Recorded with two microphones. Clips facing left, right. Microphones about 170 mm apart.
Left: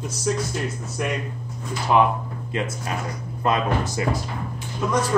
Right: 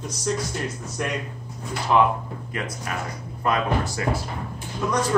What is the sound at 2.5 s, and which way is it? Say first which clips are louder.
Speech: left 3 dB; 25° left (ahead or behind).